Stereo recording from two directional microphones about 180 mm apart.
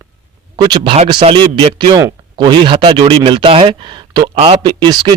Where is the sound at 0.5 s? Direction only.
25° right (ahead or behind).